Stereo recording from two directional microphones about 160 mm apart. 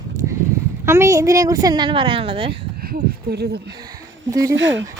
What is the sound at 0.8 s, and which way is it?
Speech, 15° right (ahead or behind).